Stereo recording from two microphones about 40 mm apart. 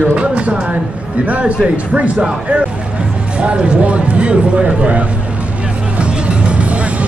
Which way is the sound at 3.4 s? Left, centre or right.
Right.